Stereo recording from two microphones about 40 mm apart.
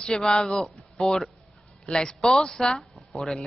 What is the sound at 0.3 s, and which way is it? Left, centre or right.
A woman's voice, centre.